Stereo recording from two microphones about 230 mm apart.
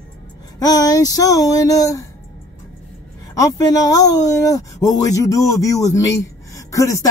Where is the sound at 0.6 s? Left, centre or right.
Centre.